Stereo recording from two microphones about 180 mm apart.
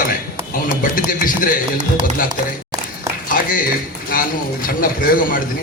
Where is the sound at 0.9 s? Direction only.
50° left (ahead or behind).